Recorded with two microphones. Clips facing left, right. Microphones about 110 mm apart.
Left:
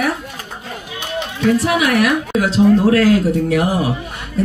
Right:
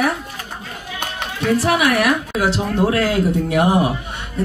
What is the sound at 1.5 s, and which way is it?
Speech, 30° right (ahead or behind).